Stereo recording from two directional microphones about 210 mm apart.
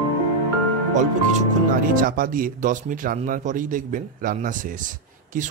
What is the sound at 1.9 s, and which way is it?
A man's voice, 40° right (ahead or behind).